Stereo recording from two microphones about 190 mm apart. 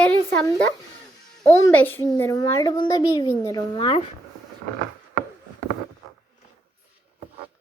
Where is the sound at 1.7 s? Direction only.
10° left (ahead or behind); by 4.0 s 25° left (ahead or behind).